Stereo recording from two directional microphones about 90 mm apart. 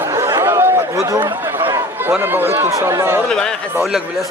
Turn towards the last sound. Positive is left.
turn(degrees=10)  # may be behind; listen again after turning